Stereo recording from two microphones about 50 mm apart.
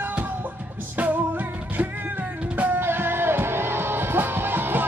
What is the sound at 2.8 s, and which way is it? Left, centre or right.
Music, right.